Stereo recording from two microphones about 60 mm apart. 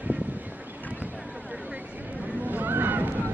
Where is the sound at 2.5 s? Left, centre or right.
Right.